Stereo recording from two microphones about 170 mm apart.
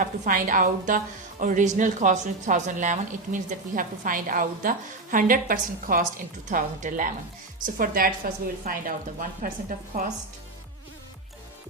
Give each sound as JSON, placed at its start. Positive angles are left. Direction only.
{"t": 0.0, "sound": "a woman's voice", "side_deg": -50}